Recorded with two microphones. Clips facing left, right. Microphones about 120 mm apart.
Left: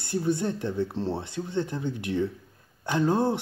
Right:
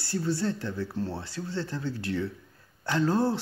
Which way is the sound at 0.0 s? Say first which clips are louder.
Left 2 dB; 20° left (ahead or behind).